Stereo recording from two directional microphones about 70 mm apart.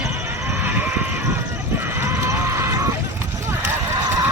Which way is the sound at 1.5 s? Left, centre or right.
Right.